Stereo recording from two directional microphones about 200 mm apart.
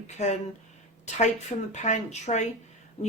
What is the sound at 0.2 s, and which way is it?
Speech, 35° left (ahead or behind).